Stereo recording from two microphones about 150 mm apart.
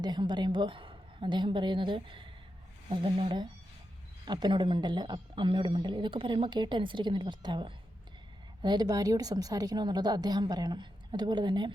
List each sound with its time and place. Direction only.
0.0 s a woman's voice: 30° right (ahead or behind)